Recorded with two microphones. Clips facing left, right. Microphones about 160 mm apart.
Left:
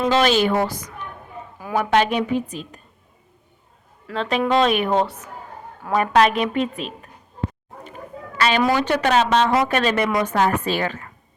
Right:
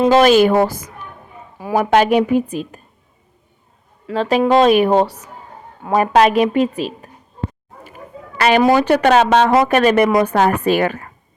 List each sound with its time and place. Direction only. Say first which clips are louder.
0.0 s a woman's voice: right 7 dB; 45° right (ahead or behind)
4.1 s a woman's voice: right 6 dB; 40° right (ahead or behind)
8.4 s a woman's voice: right 7 dB; 45° right (ahead or behind)